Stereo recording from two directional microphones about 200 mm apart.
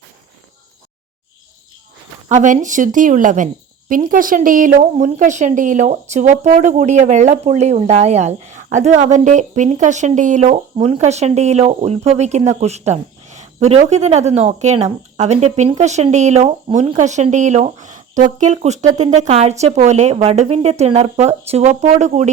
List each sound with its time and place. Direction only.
2.3 s a woman's voice: 40° right (ahead or behind)